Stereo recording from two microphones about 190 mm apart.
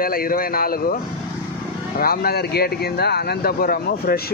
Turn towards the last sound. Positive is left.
turn(degrees=55)  # may be behind; listen again after turning